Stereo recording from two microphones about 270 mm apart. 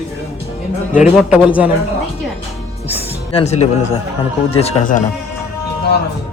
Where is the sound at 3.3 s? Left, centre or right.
Left.